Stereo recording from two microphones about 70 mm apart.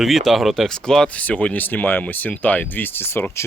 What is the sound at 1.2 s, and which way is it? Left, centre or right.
Speech, left.